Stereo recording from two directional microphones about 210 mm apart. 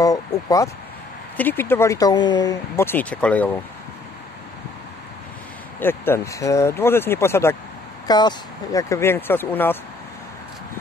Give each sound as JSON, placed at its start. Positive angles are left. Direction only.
{"t": 0.0, "sound": "speech", "side_deg": 15}
{"t": 5.8, "sound": "speech", "side_deg": 10}